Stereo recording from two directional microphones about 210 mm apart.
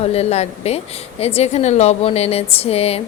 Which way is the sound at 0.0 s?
30° left (ahead or behind).